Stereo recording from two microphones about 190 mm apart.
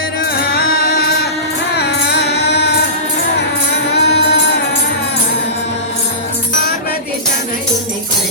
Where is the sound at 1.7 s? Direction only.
60° left (ahead or behind).